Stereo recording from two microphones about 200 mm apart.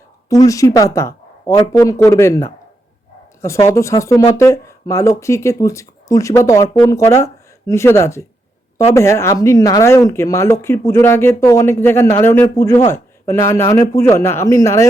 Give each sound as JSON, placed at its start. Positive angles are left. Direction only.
{"t": 0.3, "sound": "speech", "side_deg": 15}